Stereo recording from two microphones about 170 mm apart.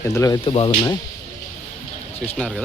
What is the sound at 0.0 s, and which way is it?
Speech, 15° left (ahead or behind).